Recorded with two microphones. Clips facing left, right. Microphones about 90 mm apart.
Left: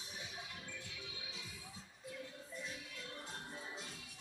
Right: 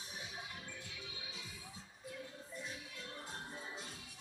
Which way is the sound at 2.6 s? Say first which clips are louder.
Even; 20° right (ahead or behind).